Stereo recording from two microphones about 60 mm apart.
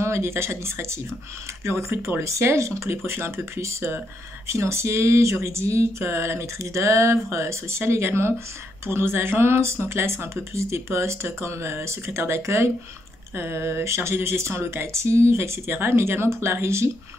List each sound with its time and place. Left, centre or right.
0.0 s speech: right